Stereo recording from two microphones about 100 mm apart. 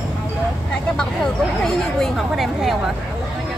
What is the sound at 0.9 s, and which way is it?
Speech, 5° left (ahead or behind).